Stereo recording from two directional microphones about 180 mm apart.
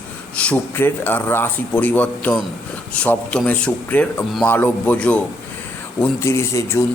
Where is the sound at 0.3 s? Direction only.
10° left (ahead or behind).